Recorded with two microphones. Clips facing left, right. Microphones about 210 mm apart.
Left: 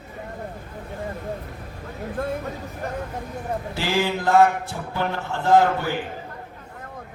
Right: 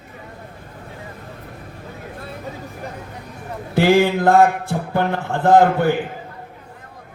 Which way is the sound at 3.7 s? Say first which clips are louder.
Right 10 dB; 55° right (ahead or behind).